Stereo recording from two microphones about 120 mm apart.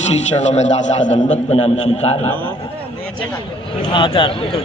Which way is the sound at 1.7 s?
65° left (ahead or behind).